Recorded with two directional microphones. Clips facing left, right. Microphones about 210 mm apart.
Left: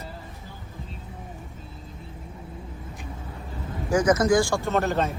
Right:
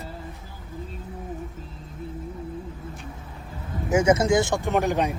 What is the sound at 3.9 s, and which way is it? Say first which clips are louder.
Speech: right 1 dB; 25° right (ahead or behind).